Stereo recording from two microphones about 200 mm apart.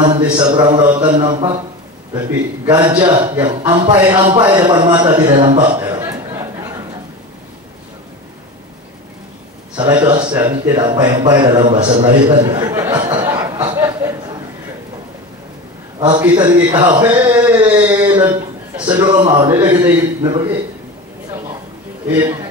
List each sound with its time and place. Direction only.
0.0 s a man's voice: 20° right (ahead or behind)
9.8 s a man's voice: 20° right (ahead or behind)
13.7 s a sound: 10° right (ahead or behind)
16.0 s a man's voice: 20° right (ahead or behind)
18.0 s a man's voice: 20° right (ahead or behind)
22.2 s a man's voice: 20° right (ahead or behind)